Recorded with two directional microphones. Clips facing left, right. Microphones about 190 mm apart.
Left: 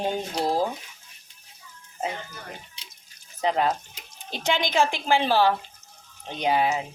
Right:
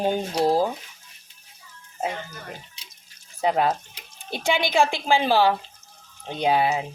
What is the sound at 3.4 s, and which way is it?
Speech, 10° right (ahead or behind).